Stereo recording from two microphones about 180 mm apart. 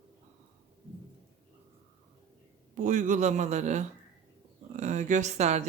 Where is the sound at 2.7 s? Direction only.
45° right (ahead or behind).